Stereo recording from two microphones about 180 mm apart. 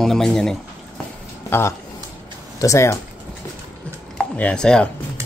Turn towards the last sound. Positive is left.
turn(degrees=5)  # may be behind; listen again after turning